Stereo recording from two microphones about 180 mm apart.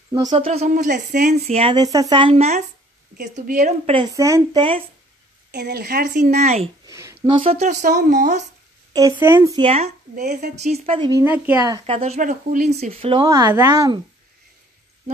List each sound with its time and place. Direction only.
0.3 s speech: 35° right (ahead or behind)
3.9 s a woman's voice: 20° right (ahead or behind)
5.5 s a woman's voice: 65° right (ahead or behind)
6.3 s speech: 40° right (ahead or behind)
6.9 s a sound: 15° right (ahead or behind)
7.2 s speech: 30° right (ahead or behind)
8.9 s a woman's voice: 15° right (ahead or behind)
9.6 s speech: 35° right (ahead or behind)
11.1 s a woman's voice: 15° right (ahead or behind)
11.8 s speech: 35° right (ahead or behind)